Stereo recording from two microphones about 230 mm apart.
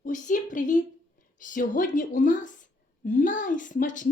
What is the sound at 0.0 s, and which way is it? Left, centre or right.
A woman's voice, left.